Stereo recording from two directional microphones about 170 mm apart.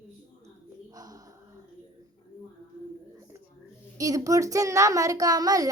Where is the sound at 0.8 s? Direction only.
20° right (ahead or behind).